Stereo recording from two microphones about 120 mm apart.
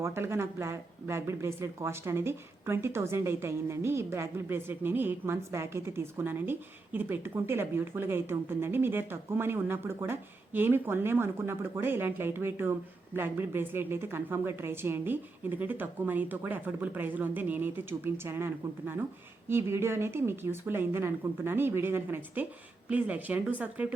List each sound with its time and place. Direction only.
0.0 s a woman's voice: 20° right (ahead or behind)